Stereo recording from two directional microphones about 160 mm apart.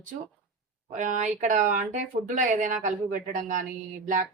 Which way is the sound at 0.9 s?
50° right (ahead or behind).